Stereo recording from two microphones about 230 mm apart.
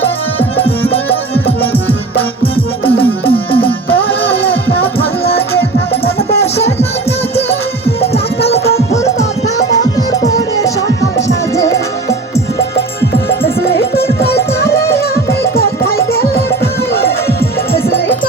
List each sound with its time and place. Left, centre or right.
0.6 s music: left
1.7 s music: centre
3.2 s music: left
7.9 s music: left
10.2 s music: centre
16.3 s music: left
17.8 s music: centre